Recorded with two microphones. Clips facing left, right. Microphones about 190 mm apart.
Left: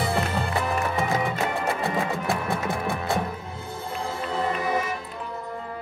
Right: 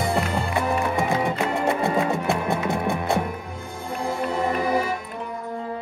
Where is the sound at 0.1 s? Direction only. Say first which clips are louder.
Right 2 dB; 15° right (ahead or behind).